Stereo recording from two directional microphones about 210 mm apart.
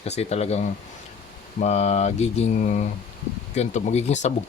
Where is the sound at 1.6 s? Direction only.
30° left (ahead or behind).